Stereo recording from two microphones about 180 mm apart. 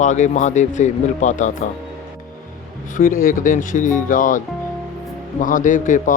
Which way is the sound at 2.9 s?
50° left (ahead or behind).